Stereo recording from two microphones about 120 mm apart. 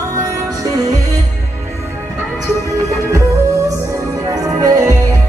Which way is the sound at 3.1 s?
30° right (ahead or behind).